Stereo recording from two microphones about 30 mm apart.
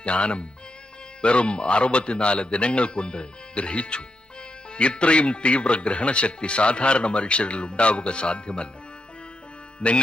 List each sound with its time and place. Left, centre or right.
0.0 s speech: left
9.8 s music: left